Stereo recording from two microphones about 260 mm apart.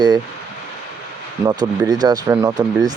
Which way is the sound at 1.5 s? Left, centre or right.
Centre.